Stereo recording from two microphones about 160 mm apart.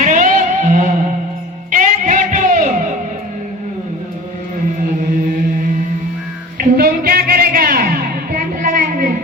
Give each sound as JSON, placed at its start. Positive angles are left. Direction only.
{"t": 0.0, "sound": "music", "side_deg": -50}
{"t": 6.6, "sound": "music", "side_deg": -65}